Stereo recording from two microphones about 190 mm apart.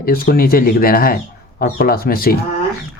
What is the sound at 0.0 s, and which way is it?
Speech, 50° left (ahead or behind).